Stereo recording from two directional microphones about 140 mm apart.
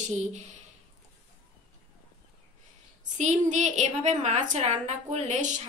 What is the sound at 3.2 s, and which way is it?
A woman's voice, 55° right (ahead or behind).